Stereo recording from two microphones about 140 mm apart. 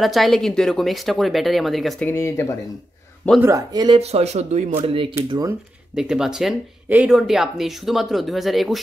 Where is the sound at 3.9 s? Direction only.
45° right (ahead or behind).